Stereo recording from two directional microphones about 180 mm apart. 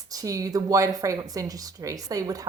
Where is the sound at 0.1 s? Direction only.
20° right (ahead or behind).